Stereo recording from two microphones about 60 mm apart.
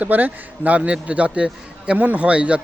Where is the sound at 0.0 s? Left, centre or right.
Right.